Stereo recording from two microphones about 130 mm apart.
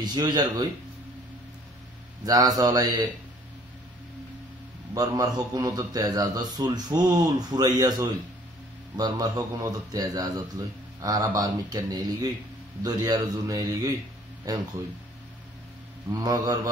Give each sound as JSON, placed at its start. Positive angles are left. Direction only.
{"t": 0.0, "sound": "speech", "side_deg": -30}
{"t": 2.2, "sound": "a man's voice", "side_deg": -30}
{"t": 4.9, "sound": "a man's voice", "side_deg": -30}
{"t": 16.1, "sound": "a man's voice", "side_deg": -30}